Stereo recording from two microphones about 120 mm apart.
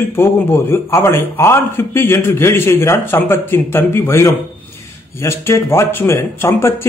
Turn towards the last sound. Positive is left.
turn(degrees=20)  # may be behind; listen again after turning